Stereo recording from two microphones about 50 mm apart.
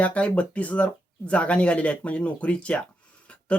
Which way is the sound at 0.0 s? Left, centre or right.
Left.